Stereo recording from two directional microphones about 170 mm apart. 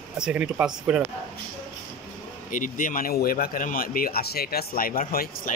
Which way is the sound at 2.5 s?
50° left (ahead or behind).